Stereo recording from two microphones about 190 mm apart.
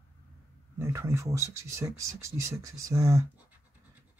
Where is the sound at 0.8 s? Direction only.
15° right (ahead or behind).